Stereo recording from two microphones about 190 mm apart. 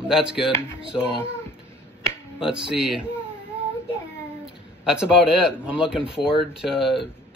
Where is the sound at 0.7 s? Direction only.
5° right (ahead or behind).